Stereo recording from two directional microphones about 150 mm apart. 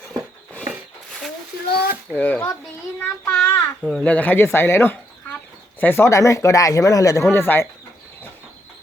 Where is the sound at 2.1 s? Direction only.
10° left (ahead or behind).